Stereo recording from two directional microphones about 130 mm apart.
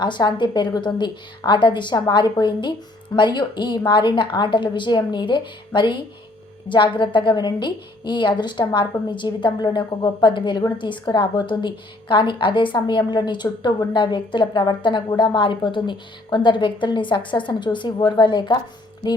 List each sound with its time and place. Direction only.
0.0 s a woman's voice: 35° left (ahead or behind)